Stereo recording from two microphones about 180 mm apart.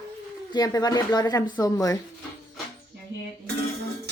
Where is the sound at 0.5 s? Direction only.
20° left (ahead or behind).